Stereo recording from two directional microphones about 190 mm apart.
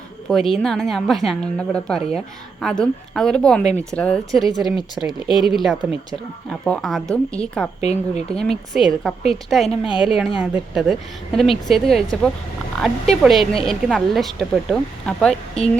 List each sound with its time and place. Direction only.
0.3 s a woman's voice: centre (ahead or behind)
7.8 s speech: 35° left (ahead or behind)
8.3 s a woman's voice: 5° left (ahead or behind)